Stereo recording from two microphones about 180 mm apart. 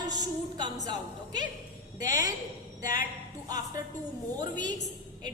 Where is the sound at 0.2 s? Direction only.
20° right (ahead or behind).